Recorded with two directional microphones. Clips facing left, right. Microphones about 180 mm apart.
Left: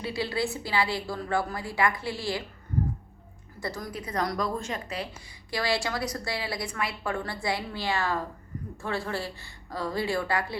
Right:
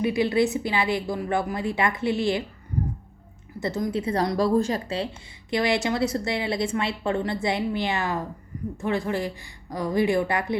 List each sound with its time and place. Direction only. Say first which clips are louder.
0.0 s a woman's voice: right 8 dB; 20° right (ahead or behind)
3.6 s a woman's voice: right 9 dB; 20° right (ahead or behind)
5.5 s a woman's voice: right 6 dB; 20° right (ahead or behind)